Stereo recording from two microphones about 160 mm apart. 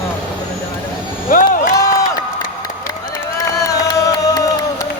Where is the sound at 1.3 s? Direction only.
55° left (ahead or behind).